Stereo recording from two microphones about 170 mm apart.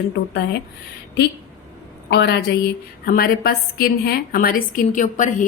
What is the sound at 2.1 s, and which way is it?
Speech, 75° left (ahead or behind).